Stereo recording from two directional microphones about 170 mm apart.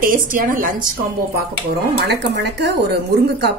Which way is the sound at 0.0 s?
55° right (ahead or behind).